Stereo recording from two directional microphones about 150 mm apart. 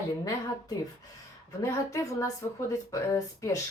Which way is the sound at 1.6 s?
20° left (ahead or behind).